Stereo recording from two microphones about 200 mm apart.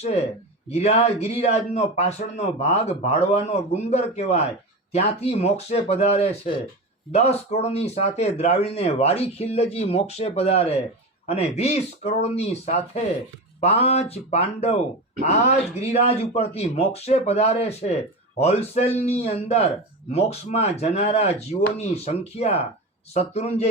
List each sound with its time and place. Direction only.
0.0 s speech: 30° left (ahead or behind)
13.6 s speech: 30° left (ahead or behind)